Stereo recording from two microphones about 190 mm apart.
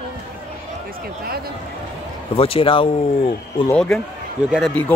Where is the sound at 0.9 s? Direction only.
50° right (ahead or behind).